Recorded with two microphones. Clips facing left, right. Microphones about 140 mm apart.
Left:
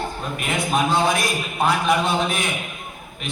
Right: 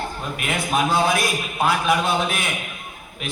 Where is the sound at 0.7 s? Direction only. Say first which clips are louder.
Even; 5° right (ahead or behind).